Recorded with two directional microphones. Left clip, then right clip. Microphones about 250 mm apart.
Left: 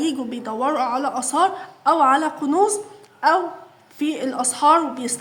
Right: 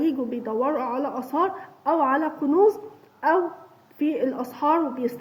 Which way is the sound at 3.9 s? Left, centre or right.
Centre.